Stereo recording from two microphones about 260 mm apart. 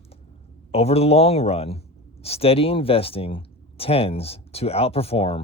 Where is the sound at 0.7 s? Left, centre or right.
Left.